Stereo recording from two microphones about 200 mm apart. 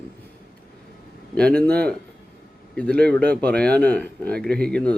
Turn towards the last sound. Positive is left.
turn(degrees=5)  # may be behind; listen again after turning